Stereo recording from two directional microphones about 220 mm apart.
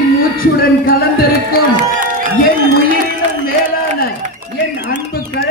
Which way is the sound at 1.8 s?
35° right (ahead or behind).